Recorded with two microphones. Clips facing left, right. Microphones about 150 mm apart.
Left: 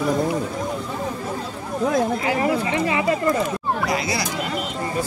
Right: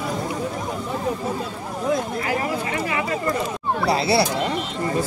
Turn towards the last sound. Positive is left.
turn(degrees=-30)  # may be behind; listen again after turning